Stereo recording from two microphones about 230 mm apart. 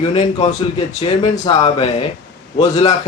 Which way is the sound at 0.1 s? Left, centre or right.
Left.